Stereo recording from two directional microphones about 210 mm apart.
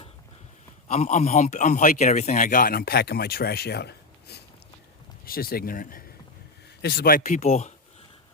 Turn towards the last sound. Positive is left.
turn(degrees=35)  # may be behind; listen again after turning